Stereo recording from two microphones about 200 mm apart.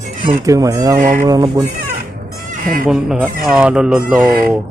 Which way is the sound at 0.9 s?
40° right (ahead or behind).